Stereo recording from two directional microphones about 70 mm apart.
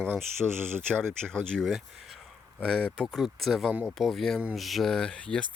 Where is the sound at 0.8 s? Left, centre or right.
Centre.